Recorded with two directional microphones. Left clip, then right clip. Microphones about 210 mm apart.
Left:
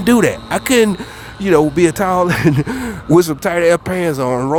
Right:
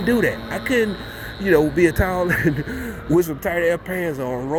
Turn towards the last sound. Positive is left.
turn(degrees=45)  # may be behind; listen again after turning